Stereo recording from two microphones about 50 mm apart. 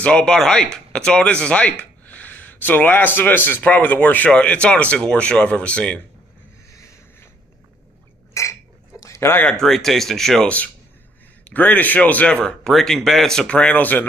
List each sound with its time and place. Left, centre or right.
0.0 s speech: centre
8.3 s a sound: left
9.0 s a sound: left
9.5 s speech: centre
10.4 s a man's voice: left
12.3 s speech: centre
12.6 s speech: centre; by 13.8 s left